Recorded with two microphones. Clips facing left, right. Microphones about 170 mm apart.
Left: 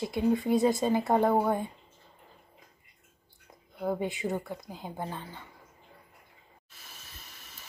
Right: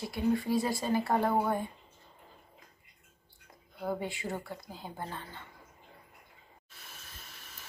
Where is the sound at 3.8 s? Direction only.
20° left (ahead or behind).